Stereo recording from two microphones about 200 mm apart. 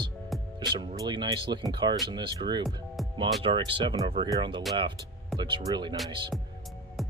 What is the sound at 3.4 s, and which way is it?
Speech, 25° right (ahead or behind).